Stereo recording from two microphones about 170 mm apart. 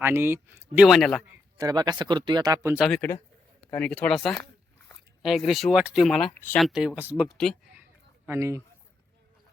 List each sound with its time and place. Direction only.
0.0 s speech: 15° right (ahead or behind)
0.9 s speech: centre (ahead or behind)
1.5 s speech: 25° right (ahead or behind)
2.7 s speech: centre (ahead or behind)
8.3 s speech: 15° right (ahead or behind)